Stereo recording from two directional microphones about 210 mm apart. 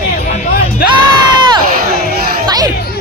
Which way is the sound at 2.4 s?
20° right (ahead or behind).